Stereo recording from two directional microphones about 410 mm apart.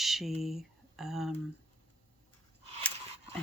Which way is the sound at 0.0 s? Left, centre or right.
Centre.